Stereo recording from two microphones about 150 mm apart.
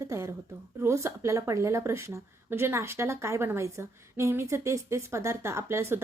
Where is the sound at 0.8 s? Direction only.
20° right (ahead or behind).